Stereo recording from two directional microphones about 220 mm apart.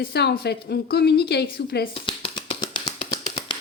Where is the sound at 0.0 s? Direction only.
45° left (ahead or behind).